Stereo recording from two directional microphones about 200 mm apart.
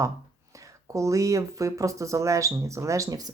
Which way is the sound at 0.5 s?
15° right (ahead or behind).